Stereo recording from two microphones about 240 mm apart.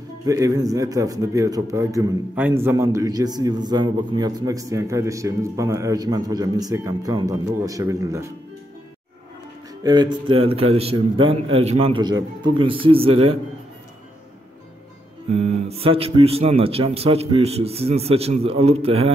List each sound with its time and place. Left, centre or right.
0.2 s a man's voice: centre
9.8 s speech: centre
15.3 s speech: right